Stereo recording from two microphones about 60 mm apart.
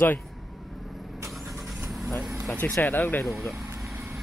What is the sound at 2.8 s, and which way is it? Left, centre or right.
Speech, left.